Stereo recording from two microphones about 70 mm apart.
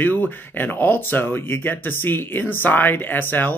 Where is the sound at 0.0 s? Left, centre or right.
Left.